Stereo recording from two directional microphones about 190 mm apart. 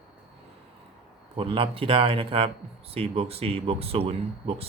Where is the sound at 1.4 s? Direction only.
30° right (ahead or behind).